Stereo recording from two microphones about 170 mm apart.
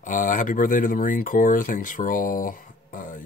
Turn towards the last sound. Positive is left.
turn(degrees=50)  # may be behind; listen again after turning